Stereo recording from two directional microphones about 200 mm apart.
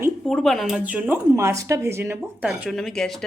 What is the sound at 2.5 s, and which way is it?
Speech, centre (ahead or behind).